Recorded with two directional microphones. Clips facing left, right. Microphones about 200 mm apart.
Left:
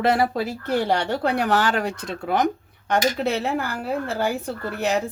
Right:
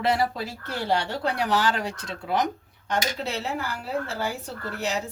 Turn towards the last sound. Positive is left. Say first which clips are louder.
# left 6 dB
turn(degrees=55)  # may be behind; listen again after turning